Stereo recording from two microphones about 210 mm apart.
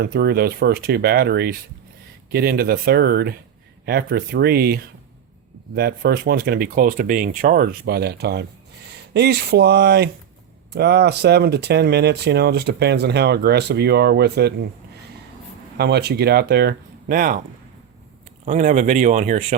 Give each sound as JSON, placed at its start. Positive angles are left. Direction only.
{"t": 0.0, "sound": "speech", "side_deg": -50}
{"t": 15.8, "sound": "speech", "side_deg": -50}
{"t": 18.4, "sound": "speech", "side_deg": -35}